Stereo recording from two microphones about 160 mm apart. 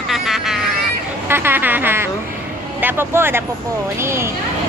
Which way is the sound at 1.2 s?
15° right (ahead or behind).